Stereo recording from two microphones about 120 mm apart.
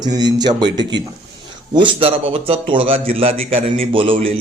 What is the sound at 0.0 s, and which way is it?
A man's voice, 35° right (ahead or behind).